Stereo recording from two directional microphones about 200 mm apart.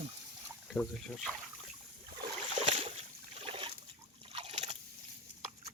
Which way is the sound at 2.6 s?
30° right (ahead or behind).